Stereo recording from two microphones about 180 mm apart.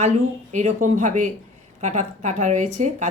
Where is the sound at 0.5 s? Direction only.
45° right (ahead or behind).